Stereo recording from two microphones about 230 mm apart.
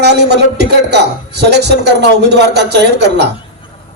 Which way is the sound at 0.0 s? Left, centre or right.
Right.